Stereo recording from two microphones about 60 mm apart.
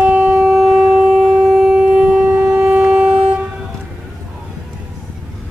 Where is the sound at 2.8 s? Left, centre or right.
Centre.